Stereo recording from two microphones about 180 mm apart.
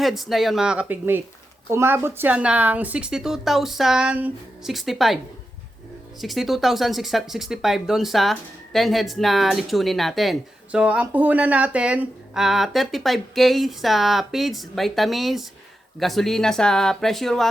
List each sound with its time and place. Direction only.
0.0 s speech: centre (ahead or behind)